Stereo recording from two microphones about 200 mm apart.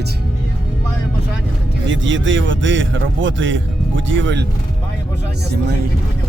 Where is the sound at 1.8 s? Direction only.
70° right (ahead or behind).